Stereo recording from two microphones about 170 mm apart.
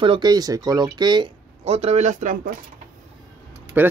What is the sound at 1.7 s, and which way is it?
Speech, 40° right (ahead or behind).